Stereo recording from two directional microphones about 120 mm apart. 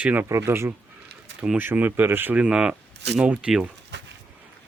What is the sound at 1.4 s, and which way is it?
Speech, 10° right (ahead or behind).